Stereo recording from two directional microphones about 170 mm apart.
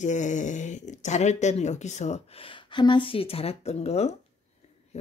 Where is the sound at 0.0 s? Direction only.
45° left (ahead or behind).